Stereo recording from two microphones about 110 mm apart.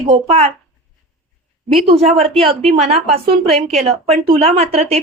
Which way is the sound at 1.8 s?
65° right (ahead or behind).